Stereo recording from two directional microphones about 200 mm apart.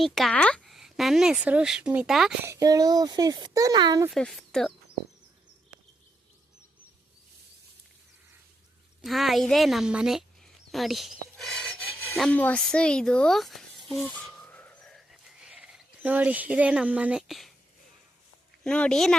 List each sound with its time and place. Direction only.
0.0 s speech: centre (ahead or behind)
2.5 s speech: 15° right (ahead or behind)
4.1 s speech: centre (ahead or behind)
9.0 s speech: centre (ahead or behind)
13.8 s a sound: centre (ahead or behind)
18.6 s speech: 5° left (ahead or behind)